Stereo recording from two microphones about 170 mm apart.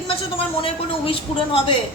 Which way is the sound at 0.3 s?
30° left (ahead or behind).